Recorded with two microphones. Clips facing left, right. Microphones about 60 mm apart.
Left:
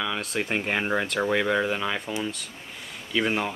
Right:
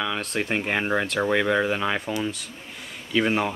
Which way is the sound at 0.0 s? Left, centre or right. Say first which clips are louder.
Right 2 dB; centre.